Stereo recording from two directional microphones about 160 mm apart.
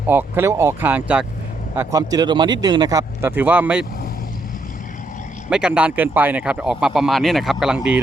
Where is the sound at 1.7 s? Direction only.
20° right (ahead or behind).